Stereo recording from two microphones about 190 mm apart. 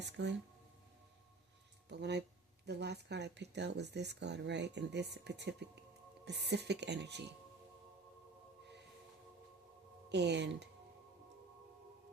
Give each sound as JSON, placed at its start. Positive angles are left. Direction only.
{"t": 0.0, "sound": "speech", "side_deg": -65}
{"t": 1.9, "sound": "speech", "side_deg": -65}
{"t": 10.1, "sound": "speech", "side_deg": -65}